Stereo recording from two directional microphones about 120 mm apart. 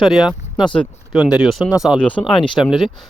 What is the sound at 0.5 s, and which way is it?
Speech, 40° left (ahead or behind).